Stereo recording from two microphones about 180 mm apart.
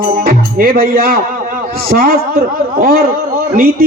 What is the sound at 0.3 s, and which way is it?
Speech, 55° right (ahead or behind).